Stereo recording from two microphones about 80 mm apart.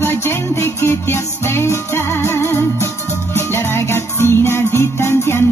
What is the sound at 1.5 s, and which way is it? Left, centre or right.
Music, left.